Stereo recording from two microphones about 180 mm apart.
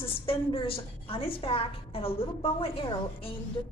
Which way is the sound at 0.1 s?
30° left (ahead or behind).